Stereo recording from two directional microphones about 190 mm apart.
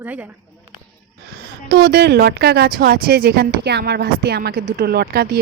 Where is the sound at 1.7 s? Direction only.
55° right (ahead or behind).